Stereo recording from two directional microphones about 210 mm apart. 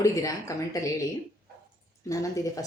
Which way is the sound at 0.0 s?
15° left (ahead or behind).